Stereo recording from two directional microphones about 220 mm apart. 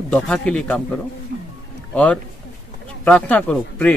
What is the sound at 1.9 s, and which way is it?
Speech, 5° left (ahead or behind).